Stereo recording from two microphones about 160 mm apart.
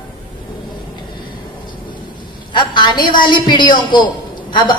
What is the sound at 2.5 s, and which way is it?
A woman's voice, 30° left (ahead or behind).